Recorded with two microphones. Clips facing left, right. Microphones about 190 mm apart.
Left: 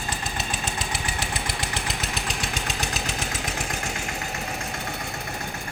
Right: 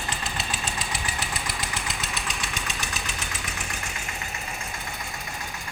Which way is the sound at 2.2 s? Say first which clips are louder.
Left 3 dB; 55° left (ahead or behind).